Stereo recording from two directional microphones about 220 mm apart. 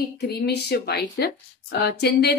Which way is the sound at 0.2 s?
45° left (ahead or behind).